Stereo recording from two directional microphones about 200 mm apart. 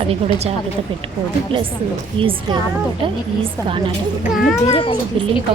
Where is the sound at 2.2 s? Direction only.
25° right (ahead or behind).